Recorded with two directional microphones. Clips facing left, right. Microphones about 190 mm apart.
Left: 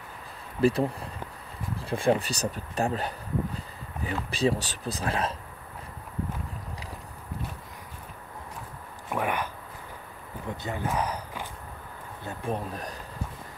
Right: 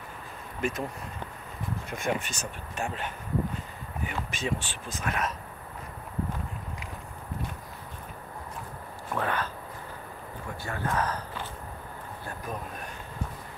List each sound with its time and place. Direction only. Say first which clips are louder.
0.6 s speech: left 8 dB; 35° left (ahead or behind)
9.1 s a sound: left 1 dB; 15° left (ahead or behind)
10.6 s speech: even; 15° left (ahead or behind)
12.3 s speech: left 6 dB; 30° left (ahead or behind)